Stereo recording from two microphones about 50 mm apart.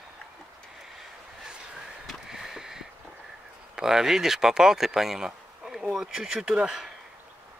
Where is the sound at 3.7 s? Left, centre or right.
Centre.